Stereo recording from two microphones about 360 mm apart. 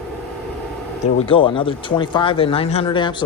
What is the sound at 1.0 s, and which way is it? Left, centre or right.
Speech, centre.